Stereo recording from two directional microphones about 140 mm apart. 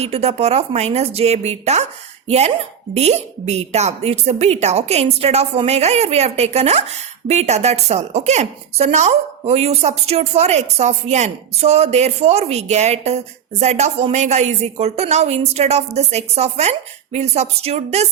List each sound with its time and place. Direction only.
0.0 s speech: 50° right (ahead or behind)